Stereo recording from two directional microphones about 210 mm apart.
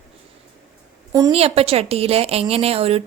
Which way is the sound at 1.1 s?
15° right (ahead or behind).